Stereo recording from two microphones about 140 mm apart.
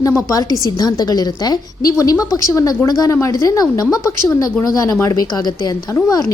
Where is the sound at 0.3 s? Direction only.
25° left (ahead or behind).